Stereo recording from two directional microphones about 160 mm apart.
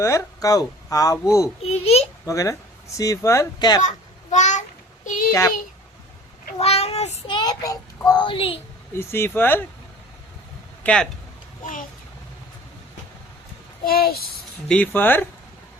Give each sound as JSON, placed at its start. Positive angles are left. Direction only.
{"t": 0.0, "sound": "speech", "side_deg": 20}
{"t": 1.6, "sound": "a child's voice", "side_deg": 40}
{"t": 2.2, "sound": "speech", "side_deg": 20}
{"t": 3.8, "sound": "child singing", "side_deg": 50}
{"t": 5.0, "sound": "a sound", "side_deg": 55}
{"t": 6.6, "sound": "child singing", "side_deg": 40}
{"t": 7.3, "sound": "speech", "side_deg": 25}
{"t": 9.0, "sound": "speech", "side_deg": 15}
{"t": 10.8, "sound": "speech", "side_deg": 5}
{"t": 11.6, "sound": "a child's voice", "side_deg": 55}
{"t": 13.8, "sound": "a child's voice", "side_deg": 75}
{"t": 14.7, "sound": "speech", "side_deg": 10}